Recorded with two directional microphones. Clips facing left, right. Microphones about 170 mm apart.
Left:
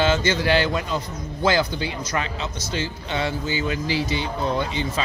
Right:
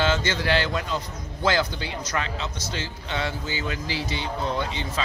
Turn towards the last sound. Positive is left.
turn(degrees=10)  # may be behind; listen again after turning